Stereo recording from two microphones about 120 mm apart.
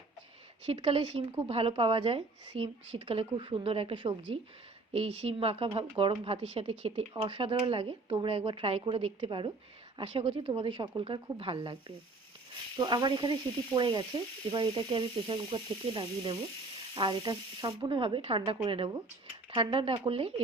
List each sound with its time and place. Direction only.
0.6 s speech: 55° right (ahead or behind)
7.1 s speech: 40° right (ahead or behind)